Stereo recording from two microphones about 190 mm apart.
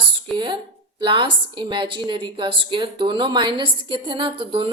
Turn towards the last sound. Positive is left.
turn(degrees=-25)  # may be behind; listen again after turning